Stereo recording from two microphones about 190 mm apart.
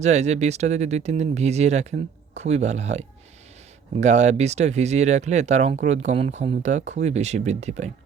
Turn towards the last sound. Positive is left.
turn(degrees=-35)  # may be behind; listen again after turning